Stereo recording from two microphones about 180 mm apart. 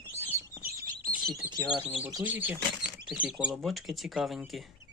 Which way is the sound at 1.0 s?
55° right (ahead or behind).